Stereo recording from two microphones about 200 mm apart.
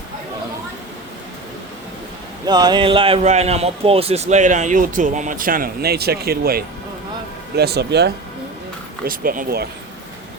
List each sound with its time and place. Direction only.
2.5 s a man's voice: 20° right (ahead or behind); by 8.1 s 55° right (ahead or behind)
9.0 s speech: 45° right (ahead or behind)